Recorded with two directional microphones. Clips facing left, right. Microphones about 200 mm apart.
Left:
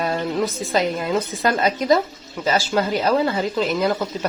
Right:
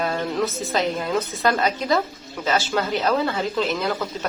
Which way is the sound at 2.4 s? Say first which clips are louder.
Left 2 dB; 5° left (ahead or behind).